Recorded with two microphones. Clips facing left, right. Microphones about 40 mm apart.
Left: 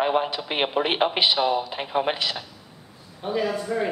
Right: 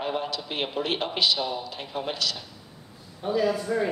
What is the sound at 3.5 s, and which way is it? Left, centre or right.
Speech, centre.